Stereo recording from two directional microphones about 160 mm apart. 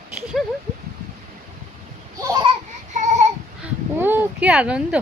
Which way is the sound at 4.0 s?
10° right (ahead or behind).